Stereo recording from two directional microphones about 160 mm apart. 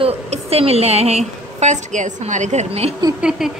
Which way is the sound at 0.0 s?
40° right (ahead or behind).